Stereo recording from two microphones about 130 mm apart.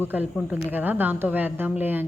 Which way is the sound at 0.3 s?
10° right (ahead or behind).